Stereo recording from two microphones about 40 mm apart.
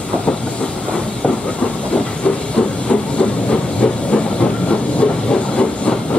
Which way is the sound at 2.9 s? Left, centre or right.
Left.